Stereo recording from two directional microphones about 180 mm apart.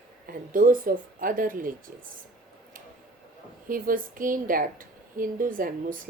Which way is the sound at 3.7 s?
50° right (ahead or behind).